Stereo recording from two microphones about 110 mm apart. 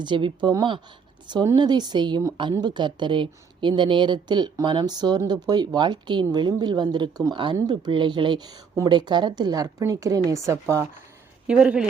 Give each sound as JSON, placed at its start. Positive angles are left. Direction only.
{"t": 0.0, "sound": "a woman's voice", "side_deg": -45}
{"t": 11.4, "sound": "speech", "side_deg": -10}